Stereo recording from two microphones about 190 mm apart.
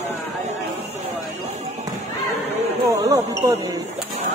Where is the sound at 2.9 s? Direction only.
15° right (ahead or behind).